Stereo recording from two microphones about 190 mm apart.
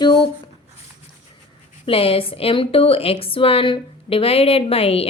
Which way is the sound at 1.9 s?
30° left (ahead or behind).